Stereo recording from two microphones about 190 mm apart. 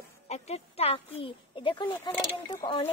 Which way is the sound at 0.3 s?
35° left (ahead or behind).